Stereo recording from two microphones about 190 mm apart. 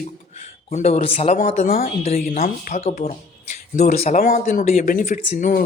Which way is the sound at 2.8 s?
35° left (ahead or behind).